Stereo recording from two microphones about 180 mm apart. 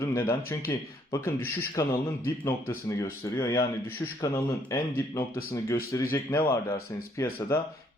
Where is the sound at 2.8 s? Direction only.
15° left (ahead or behind).